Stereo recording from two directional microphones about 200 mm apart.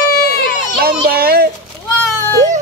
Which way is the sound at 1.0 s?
50° right (ahead or behind).